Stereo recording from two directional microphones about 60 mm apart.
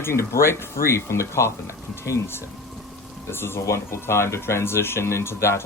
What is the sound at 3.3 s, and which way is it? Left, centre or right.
Speech, left.